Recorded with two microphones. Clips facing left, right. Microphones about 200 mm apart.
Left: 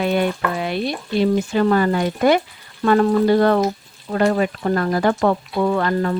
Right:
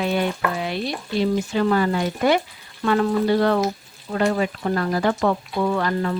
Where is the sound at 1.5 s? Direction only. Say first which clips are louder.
Left 3 dB; 50° left (ahead or behind).